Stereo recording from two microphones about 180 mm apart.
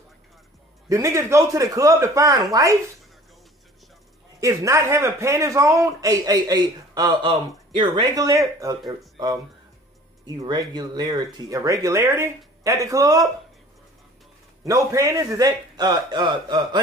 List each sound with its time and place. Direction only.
0.8 s speech: 15° right (ahead or behind)
4.4 s a man's voice: 20° right (ahead or behind)
14.6 s a man's voice: 15° right (ahead or behind)